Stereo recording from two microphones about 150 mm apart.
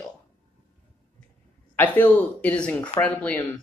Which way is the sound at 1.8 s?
10° left (ahead or behind).